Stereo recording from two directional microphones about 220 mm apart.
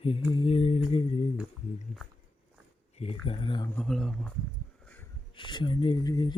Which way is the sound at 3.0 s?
25° left (ahead or behind).